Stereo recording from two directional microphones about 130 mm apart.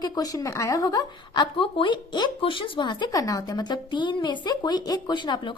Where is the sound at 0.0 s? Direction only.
30° left (ahead or behind).